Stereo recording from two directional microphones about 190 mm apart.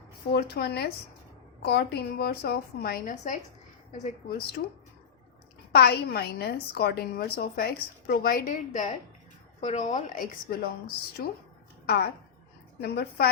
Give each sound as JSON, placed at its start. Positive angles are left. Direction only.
{"t": 0.3, "sound": "a woman's voice", "side_deg": 55}
{"t": 5.7, "sound": "a woman's voice", "side_deg": 55}